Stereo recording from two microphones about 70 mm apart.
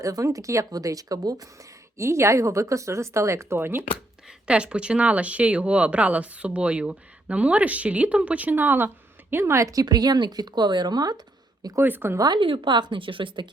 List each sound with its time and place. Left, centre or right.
0.0 s speech: right
2.0 s speech: right
4.4 s speech: centre
9.3 s speech: right
9.8 s speech: right
11.8 s speech: right
12.2 s speech: right